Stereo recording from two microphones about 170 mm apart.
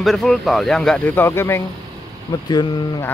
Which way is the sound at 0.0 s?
Centre (ahead or behind).